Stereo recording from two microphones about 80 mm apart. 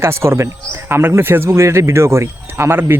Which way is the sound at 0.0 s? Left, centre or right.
Right.